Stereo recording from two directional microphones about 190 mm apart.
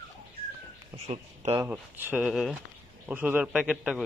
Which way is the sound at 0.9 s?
35° right (ahead or behind).